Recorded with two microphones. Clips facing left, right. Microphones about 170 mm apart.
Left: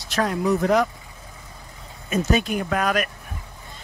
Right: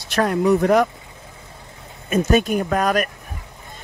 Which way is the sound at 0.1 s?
60° right (ahead or behind).